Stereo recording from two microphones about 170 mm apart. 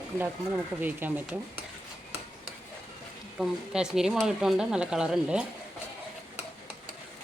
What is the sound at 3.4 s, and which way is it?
Speech, 5° right (ahead or behind).